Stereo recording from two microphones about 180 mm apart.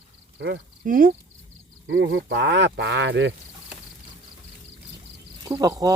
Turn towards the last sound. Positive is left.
turn(degrees=-20)  # may be behind; listen again after turning